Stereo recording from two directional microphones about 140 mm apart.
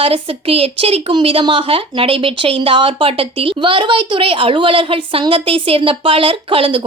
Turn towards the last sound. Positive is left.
turn(degrees=-40)  # may be behind; listen again after turning